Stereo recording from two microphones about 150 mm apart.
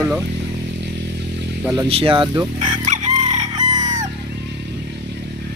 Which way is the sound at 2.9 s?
55° right (ahead or behind).